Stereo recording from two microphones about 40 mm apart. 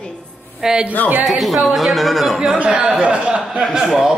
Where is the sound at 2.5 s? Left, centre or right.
Right.